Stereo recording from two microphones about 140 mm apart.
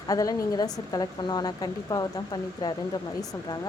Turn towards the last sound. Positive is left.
turn(degrees=30)  # may be behind; listen again after turning